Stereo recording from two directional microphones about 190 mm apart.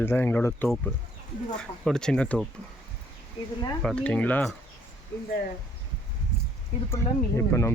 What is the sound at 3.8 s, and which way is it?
Speech, 5° left (ahead or behind).